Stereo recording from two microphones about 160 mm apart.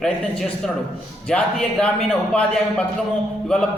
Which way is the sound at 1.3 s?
5° left (ahead or behind).